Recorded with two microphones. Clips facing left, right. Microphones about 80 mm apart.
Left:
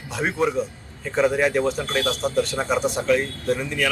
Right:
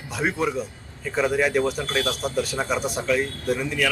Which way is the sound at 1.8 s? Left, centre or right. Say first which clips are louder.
Left 1 dB; centre.